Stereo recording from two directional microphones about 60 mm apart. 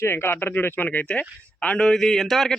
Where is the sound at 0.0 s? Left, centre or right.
Left.